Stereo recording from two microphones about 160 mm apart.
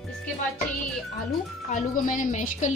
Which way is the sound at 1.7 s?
55° left (ahead or behind).